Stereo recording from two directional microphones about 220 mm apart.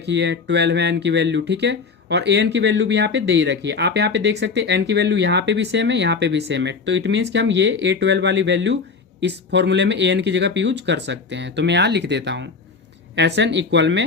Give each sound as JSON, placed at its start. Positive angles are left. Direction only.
{"t": 0.0, "sound": "speech", "side_deg": -50}